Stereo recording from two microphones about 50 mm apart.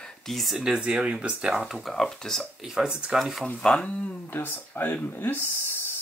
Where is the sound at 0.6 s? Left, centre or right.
Centre.